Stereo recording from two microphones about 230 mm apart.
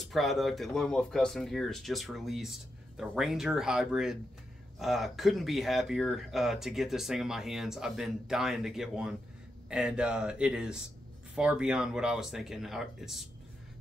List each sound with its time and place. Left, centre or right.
0.0 s speech: centre